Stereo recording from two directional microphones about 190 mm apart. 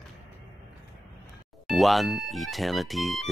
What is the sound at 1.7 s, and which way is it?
Speech, centre (ahead or behind).